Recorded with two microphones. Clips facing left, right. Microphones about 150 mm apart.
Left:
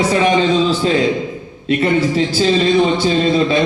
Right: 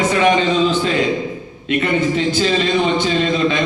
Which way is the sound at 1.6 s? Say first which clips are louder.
Left 2 dB; 35° left (ahead or behind).